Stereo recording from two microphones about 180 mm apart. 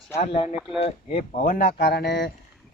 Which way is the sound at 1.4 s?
50° left (ahead or behind).